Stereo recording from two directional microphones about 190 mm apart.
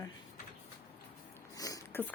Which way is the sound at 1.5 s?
20° left (ahead or behind).